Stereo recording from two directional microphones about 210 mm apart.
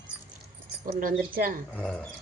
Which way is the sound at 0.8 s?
40° right (ahead or behind).